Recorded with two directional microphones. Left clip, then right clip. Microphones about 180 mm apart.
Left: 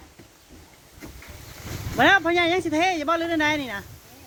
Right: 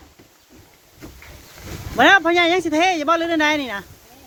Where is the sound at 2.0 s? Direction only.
15° right (ahead or behind).